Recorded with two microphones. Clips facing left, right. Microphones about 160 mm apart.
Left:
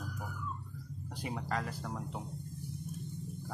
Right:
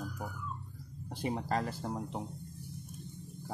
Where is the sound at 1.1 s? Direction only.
25° right (ahead or behind).